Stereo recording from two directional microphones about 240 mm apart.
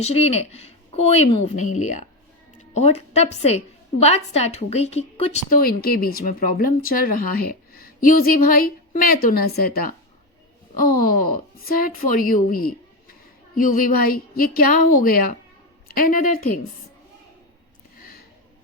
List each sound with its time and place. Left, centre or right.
0.0 s a woman's voice: left
11.0 s a woman's voice: left